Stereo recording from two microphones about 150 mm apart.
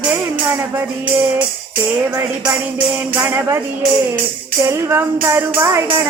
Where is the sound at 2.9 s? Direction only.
15° right (ahead or behind).